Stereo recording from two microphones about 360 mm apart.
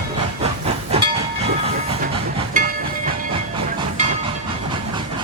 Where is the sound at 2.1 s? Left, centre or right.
Centre.